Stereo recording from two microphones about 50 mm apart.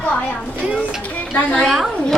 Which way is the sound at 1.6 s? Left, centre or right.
Centre.